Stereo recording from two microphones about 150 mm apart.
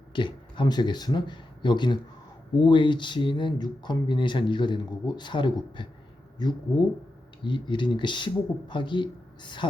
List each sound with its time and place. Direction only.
0.1 s speech: 35° left (ahead or behind)